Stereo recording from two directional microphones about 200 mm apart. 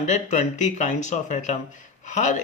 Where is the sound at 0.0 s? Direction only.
35° left (ahead or behind).